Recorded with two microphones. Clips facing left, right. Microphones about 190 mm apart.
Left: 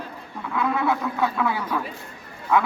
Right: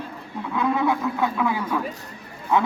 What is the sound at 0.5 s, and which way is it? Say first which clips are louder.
A man's voice: right 1 dB; 20° right (ahead or behind).